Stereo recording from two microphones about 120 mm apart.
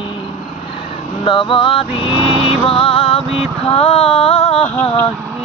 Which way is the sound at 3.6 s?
55° left (ahead or behind).